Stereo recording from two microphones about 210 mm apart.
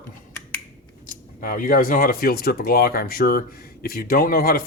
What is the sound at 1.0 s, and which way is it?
Speech, 40° left (ahead or behind).